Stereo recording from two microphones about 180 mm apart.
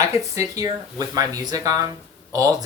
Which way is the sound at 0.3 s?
20° right (ahead or behind).